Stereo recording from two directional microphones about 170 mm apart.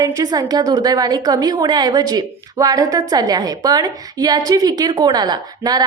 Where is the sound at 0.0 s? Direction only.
20° right (ahead or behind).